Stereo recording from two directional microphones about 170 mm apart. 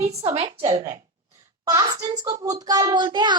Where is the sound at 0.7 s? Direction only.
20° right (ahead or behind).